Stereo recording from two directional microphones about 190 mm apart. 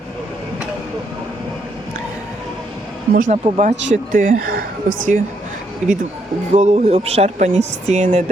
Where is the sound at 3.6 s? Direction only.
40° right (ahead or behind).